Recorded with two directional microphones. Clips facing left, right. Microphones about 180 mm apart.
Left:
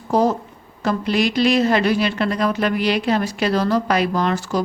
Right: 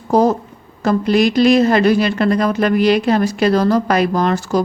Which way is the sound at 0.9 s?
45° right (ahead or behind).